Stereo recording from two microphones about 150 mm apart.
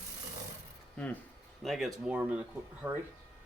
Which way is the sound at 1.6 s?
Centre (ahead or behind).